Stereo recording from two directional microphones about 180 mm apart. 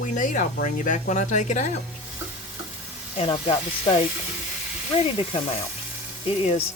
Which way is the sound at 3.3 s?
30° left (ahead or behind).